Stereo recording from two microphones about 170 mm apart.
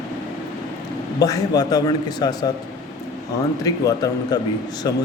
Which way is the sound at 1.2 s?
20° left (ahead or behind).